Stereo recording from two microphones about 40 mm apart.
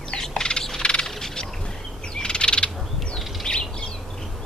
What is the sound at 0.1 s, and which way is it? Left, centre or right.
Bird, centre.